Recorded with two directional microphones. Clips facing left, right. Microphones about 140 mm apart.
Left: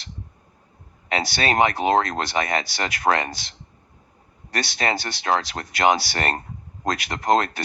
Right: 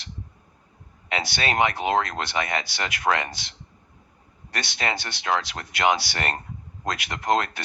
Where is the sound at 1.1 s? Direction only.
40° left (ahead or behind).